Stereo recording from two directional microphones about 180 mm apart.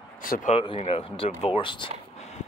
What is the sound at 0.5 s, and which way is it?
Speech, 30° left (ahead or behind).